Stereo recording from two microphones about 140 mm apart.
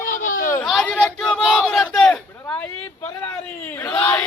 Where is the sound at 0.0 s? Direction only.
70° left (ahead or behind).